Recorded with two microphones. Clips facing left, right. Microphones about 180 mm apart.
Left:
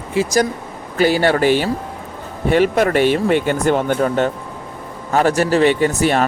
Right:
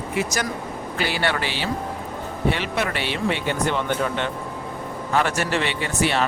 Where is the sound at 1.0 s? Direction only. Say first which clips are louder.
Left 11 dB; 40° left (ahead or behind).